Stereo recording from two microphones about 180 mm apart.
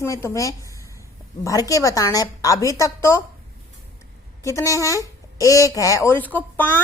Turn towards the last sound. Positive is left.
turn(degrees=10)  # may be behind; listen again after turning